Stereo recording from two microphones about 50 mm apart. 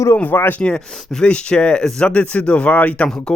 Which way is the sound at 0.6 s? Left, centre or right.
Centre.